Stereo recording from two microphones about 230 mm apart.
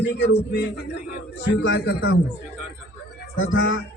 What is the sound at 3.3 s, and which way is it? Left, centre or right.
Speech, left.